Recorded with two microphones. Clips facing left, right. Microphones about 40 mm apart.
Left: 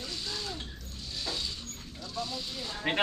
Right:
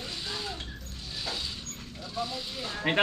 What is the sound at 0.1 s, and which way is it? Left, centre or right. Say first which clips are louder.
Music: right 2 dB; right.